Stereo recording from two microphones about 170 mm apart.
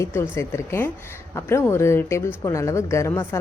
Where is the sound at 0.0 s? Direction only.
15° left (ahead or behind).